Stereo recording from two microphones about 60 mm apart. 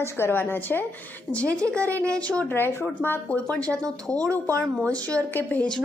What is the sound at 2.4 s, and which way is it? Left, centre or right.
Speech, left.